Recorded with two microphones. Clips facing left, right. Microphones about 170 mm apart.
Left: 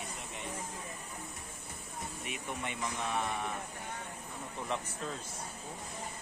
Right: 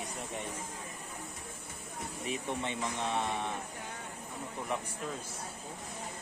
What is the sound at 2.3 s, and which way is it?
Speech, 25° right (ahead or behind).